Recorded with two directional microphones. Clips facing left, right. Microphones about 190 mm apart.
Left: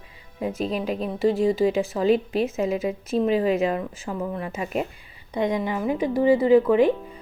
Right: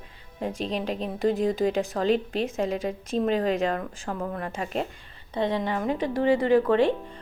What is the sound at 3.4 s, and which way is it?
Speech, 10° left (ahead or behind).